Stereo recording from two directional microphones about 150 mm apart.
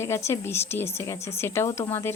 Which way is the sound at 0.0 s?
20° left (ahead or behind).